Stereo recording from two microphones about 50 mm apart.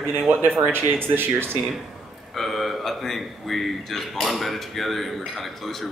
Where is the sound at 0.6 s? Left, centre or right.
Right.